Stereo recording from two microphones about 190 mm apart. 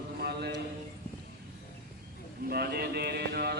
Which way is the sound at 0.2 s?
60° right (ahead or behind).